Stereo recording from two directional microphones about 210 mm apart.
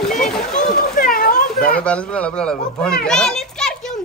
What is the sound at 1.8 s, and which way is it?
Speech, 5° left (ahead or behind).